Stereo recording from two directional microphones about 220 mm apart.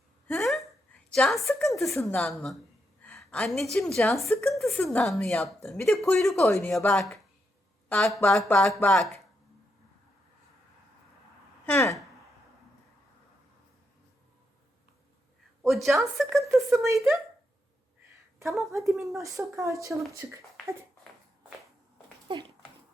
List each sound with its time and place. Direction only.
0.3 s hiccup: centre (ahead or behind)
1.1 s a woman's voice: centre (ahead or behind)
11.6 s a sound: 10° left (ahead or behind)
15.6 s a woman's voice: centre (ahead or behind)
16.8 s speech: 15° right (ahead or behind)
18.7 s speech: 15° right (ahead or behind)
22.3 s dog: 20° right (ahead or behind)